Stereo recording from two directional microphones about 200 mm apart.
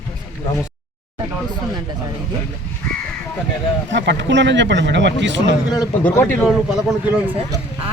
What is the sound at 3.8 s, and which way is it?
Speech, 60° right (ahead or behind).